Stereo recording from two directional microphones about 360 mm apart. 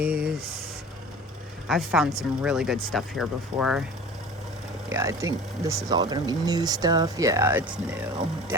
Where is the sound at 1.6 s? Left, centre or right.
Centre.